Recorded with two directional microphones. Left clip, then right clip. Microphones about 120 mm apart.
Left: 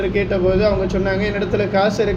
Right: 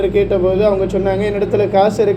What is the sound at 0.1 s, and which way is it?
Speech, 35° right (ahead or behind).